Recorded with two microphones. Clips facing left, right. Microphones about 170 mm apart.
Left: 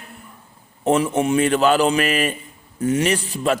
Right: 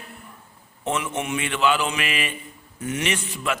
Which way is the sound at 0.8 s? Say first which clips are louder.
Left 9 dB; 35° left (ahead or behind).